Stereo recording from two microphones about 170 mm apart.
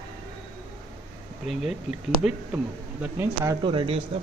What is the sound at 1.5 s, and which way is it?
Speech, centre (ahead or behind).